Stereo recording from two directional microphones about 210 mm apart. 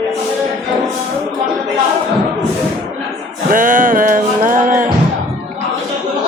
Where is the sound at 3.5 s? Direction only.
40° right (ahead or behind).